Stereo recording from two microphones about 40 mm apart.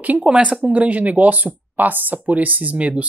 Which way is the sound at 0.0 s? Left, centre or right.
Right.